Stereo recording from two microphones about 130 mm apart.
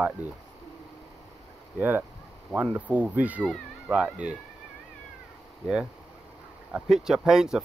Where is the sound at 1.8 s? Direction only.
15° right (ahead or behind).